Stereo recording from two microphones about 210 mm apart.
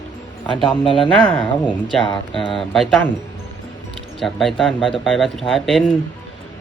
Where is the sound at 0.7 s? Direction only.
25° left (ahead or behind).